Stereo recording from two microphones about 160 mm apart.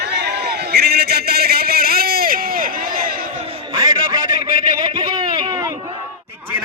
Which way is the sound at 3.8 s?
25° right (ahead or behind).